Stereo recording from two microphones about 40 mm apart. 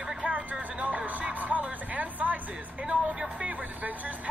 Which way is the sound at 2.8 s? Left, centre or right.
Right.